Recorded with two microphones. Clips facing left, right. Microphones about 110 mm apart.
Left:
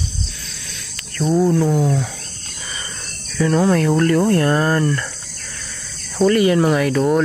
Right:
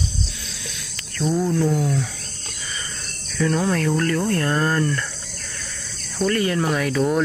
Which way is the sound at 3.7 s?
10° left (ahead or behind).